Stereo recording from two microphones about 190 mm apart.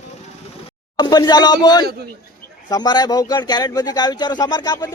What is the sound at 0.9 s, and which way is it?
Speech, 20° left (ahead or behind).